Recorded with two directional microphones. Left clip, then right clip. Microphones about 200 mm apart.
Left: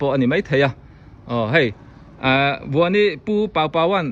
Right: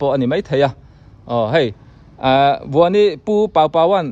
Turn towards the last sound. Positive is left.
turn(degrees=-10)  # may be behind; listen again after turning